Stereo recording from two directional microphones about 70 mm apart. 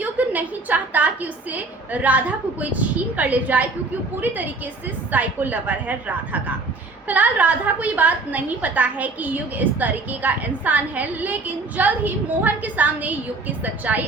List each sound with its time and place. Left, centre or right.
0.0 s a woman's voice: right